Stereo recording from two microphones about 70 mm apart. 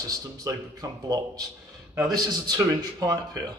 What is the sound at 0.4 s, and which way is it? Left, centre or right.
Speech, right.